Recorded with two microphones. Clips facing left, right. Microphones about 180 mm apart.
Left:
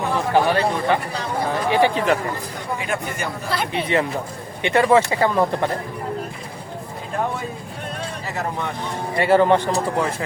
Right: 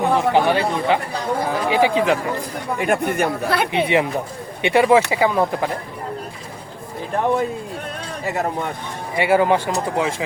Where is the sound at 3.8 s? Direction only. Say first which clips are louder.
Right 1 dB; 15° right (ahead or behind).